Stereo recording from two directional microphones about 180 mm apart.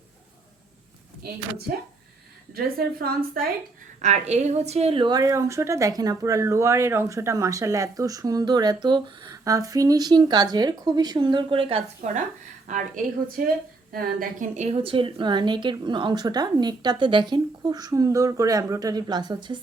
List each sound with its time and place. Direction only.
2.5 s a woman's voice: 55° right (ahead or behind)
4.0 s a woman's voice: 40° right (ahead or behind)
12.0 s a woman's voice: 40° right (ahead or behind); by 19.5 s 25° right (ahead or behind)